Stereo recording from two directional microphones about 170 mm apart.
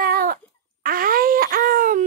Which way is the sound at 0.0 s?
60° right (ahead or behind).